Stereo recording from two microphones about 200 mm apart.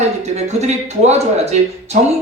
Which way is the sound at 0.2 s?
35° right (ahead or behind).